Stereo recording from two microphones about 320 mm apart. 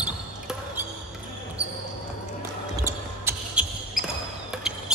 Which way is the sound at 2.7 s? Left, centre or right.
Centre.